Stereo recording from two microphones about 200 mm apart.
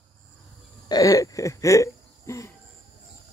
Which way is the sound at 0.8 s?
20° left (ahead or behind).